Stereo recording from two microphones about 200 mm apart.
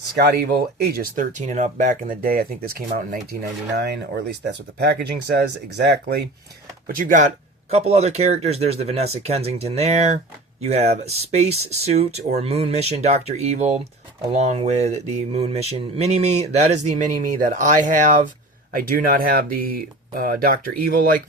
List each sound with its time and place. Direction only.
0.2 s speech: 50° right (ahead or behind)
3.8 s speech: 55° right (ahead or behind)
6.8 s speech: 45° right (ahead or behind)